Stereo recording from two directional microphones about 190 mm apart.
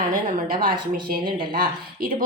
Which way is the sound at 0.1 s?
45° right (ahead or behind).